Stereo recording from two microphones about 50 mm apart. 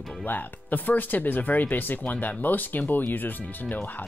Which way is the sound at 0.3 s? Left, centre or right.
Left.